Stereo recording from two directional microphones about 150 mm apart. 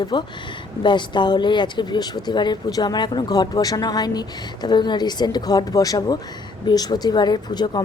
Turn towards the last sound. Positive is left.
turn(degrees=30)  # may be behind; listen again after turning